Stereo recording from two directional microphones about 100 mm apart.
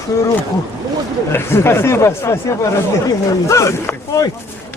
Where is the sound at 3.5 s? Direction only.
30° left (ahead or behind).